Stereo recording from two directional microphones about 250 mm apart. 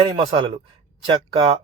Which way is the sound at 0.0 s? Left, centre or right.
Centre.